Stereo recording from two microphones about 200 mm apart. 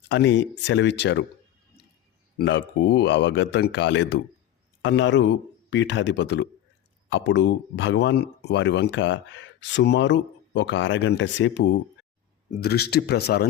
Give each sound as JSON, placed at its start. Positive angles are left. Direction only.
{"t": 0.1, "sound": "speech", "side_deg": 60}
{"t": 2.4, "sound": "speech", "side_deg": 60}
{"t": 12.5, "sound": "speech", "side_deg": 50}